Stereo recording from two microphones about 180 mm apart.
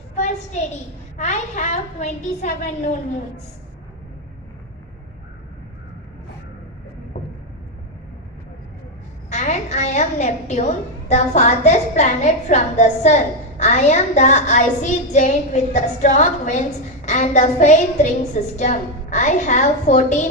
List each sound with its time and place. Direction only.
0.2 s a sound: 40° left (ahead or behind)
1.1 s a woman's voice: 40° left (ahead or behind)
9.3 s a woman's voice: 40° left (ahead or behind)